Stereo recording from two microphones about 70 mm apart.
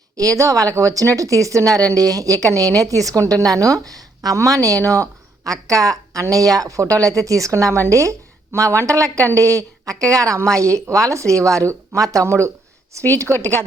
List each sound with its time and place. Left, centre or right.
0.2 s a woman's voice: right